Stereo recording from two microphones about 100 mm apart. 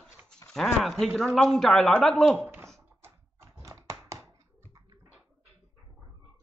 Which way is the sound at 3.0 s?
25° right (ahead or behind).